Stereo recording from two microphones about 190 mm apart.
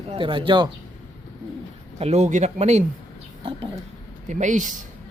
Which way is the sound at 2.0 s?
35° right (ahead or behind).